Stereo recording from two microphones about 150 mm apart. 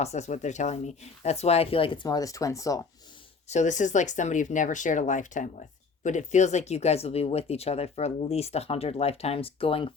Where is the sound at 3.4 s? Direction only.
50° left (ahead or behind).